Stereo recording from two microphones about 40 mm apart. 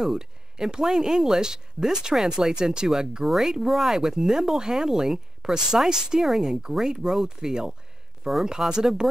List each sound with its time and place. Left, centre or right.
0.0 s speech: centre